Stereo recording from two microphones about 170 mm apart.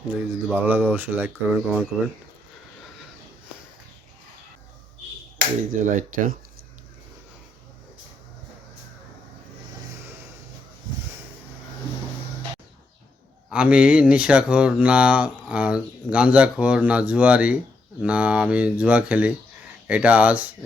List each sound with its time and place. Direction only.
0.1 s speech: 10° right (ahead or behind)
5.7 s speech: 50° right (ahead or behind)
13.5 s speech: 5° right (ahead or behind)